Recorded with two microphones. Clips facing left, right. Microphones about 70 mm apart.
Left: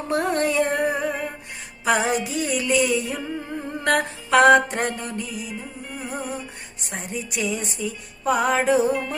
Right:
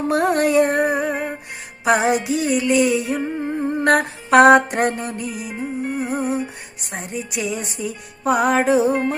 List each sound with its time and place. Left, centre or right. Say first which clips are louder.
0.1 s music: right 4 dB; centre
0.9 s music: right 4 dB; right
2.4 s music: right 5 dB; centre
2.7 s music: right 4 dB; right
3.5 s humming: right 8 dB; centre
3.8 s humming: right 3 dB; right
4.4 s a sound: right 3 dB; centre
4.9 s music: right 4 dB; right
8.6 s music: right 3 dB; centre
8.9 s music: right 5 dB; right